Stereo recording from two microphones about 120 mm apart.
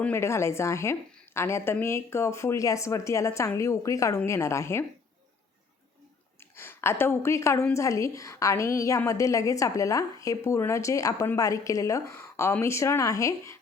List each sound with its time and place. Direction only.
0.0 s a woman's voice: 20° left (ahead or behind)
6.6 s a woman's voice: 20° left (ahead or behind)